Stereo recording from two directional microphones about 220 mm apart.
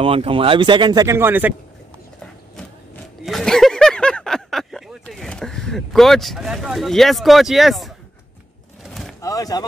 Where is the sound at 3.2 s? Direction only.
Centre (ahead or behind).